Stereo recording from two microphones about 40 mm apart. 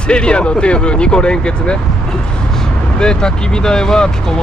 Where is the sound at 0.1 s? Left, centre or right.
Left.